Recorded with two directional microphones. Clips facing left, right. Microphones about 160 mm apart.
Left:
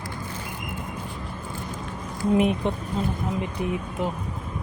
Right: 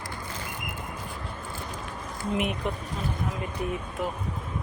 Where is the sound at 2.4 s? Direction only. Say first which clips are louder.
Left 7 dB; 30° left (ahead or behind).